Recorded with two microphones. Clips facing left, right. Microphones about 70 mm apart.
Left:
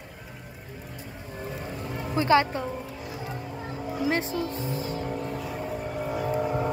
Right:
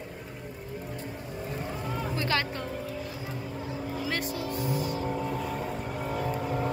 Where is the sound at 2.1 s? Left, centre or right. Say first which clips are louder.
Left 10 dB; left.